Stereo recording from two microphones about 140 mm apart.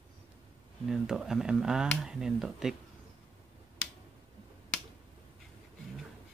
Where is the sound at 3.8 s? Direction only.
10° left (ahead or behind).